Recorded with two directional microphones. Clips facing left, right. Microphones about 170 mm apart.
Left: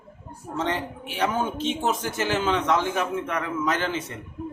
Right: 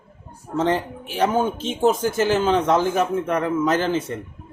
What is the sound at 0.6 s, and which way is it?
A man's voice, 35° right (ahead or behind).